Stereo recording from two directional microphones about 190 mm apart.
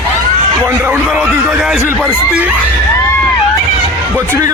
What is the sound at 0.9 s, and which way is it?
A man's voice, 10° right (ahead or behind).